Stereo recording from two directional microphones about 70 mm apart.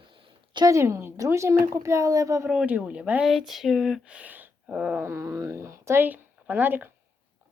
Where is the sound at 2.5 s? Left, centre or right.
Centre.